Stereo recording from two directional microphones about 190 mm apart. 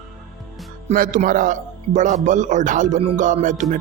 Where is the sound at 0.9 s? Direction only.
45° right (ahead or behind).